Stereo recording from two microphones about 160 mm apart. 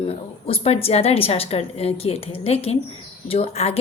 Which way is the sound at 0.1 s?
40° left (ahead or behind).